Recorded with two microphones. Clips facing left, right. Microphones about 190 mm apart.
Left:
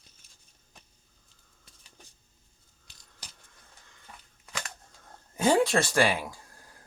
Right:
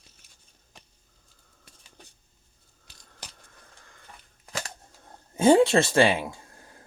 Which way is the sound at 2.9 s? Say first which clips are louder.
Right 6 dB; 55° right (ahead or behind).